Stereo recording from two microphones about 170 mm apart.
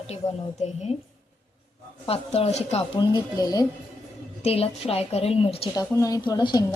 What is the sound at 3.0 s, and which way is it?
Speech, 25° left (ahead or behind).